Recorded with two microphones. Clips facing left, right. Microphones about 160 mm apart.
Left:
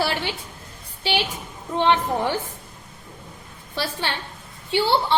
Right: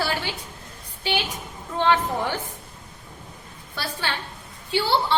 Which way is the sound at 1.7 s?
20° left (ahead or behind).